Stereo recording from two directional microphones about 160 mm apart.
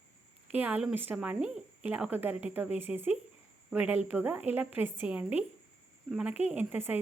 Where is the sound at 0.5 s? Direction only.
10° right (ahead or behind).